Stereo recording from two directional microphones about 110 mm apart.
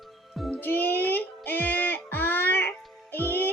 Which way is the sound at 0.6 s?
15° left (ahead or behind).